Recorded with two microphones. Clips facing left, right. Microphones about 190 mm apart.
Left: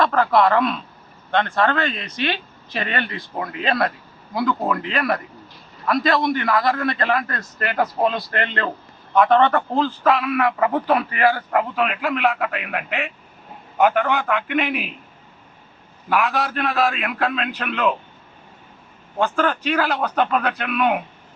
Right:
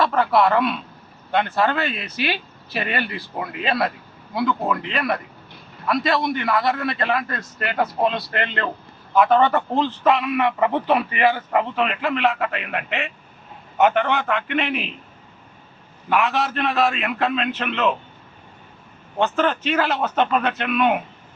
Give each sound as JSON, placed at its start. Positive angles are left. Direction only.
{"t": 0.0, "sound": "a man's voice", "side_deg": -5}
{"t": 10.9, "sound": "a man's voice", "side_deg": -15}
{"t": 11.5, "sound": "a man's voice", "side_deg": 5}
{"t": 16.0, "sound": "a man's voice", "side_deg": 5}
{"t": 19.2, "sound": "a man's voice", "side_deg": -5}